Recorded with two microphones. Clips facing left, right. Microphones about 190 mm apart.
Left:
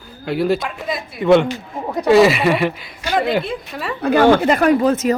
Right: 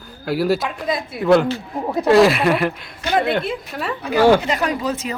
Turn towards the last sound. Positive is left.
turn(degrees=50)  # may be behind; listen again after turning